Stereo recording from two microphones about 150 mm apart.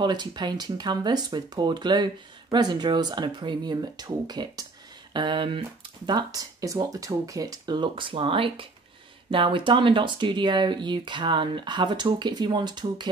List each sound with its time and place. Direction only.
0.0 s speech: 30° right (ahead or behind)